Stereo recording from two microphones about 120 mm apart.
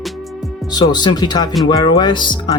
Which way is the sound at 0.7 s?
35° left (ahead or behind).